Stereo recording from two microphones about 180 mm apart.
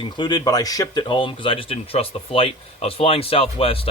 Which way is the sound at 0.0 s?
25° left (ahead or behind).